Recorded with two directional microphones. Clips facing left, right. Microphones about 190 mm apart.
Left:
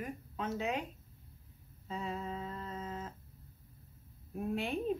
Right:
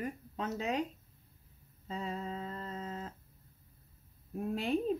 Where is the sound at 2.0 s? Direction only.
35° right (ahead or behind).